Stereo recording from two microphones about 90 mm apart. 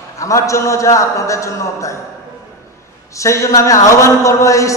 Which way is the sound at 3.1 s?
35° left (ahead or behind).